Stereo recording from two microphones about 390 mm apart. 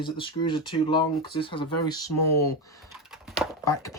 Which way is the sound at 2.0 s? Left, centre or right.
Left.